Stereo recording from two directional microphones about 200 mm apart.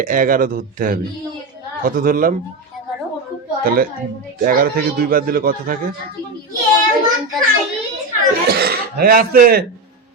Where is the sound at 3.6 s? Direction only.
45° right (ahead or behind).